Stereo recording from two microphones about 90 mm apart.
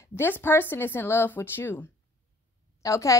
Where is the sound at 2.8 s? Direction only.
35° left (ahead or behind).